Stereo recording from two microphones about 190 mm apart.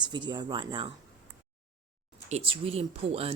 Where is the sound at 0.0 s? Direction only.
25° right (ahead or behind).